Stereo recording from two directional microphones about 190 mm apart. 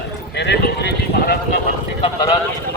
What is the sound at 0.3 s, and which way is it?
Clip-clop, 65° left (ahead or behind).